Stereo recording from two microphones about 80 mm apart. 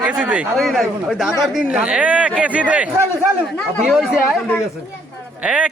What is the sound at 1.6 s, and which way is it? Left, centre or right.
Speech, centre.